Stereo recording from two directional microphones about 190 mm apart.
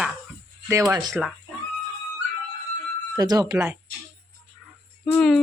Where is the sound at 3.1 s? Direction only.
20° right (ahead or behind).